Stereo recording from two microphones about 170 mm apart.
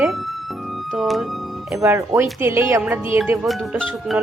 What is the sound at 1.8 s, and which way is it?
Speech, 15° right (ahead or behind).